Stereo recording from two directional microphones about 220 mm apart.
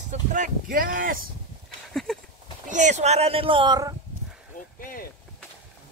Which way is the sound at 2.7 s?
30° right (ahead or behind).